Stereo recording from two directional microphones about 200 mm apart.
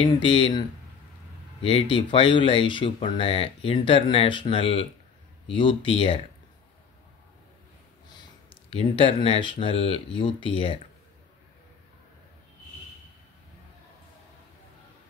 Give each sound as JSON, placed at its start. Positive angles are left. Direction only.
{"t": 0.0, "sound": "speech", "side_deg": 25}
{"t": 8.1, "sound": "speech", "side_deg": 20}